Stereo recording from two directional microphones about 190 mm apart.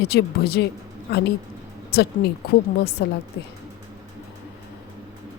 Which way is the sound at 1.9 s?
55° left (ahead or behind).